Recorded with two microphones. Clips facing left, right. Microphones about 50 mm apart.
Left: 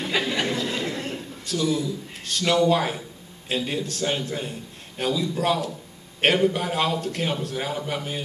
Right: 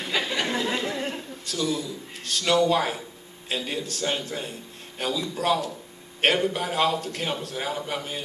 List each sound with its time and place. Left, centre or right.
0.0 s a sound: centre
0.5 s chatter: centre
1.4 s a man's voice: centre